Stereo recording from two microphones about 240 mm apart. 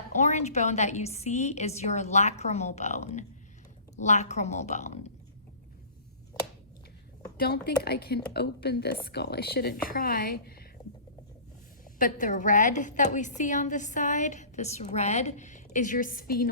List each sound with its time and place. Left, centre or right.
0.2 s a woman's voice: left
7.3 s a woman's voice: left
11.9 s a woman's voice: left